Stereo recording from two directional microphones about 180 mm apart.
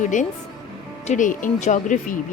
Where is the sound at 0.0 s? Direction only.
45° left (ahead or behind).